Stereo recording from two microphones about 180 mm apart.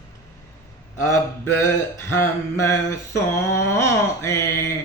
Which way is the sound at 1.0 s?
15° left (ahead or behind).